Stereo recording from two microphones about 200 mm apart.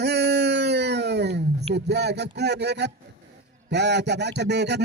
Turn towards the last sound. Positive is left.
turn(degrees=-60)  # may be behind; listen again after turning